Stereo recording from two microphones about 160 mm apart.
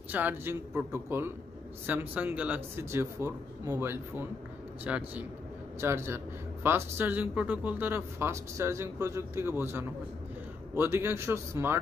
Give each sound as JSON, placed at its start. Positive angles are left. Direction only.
{"t": 0.1, "sound": "speech", "side_deg": -10}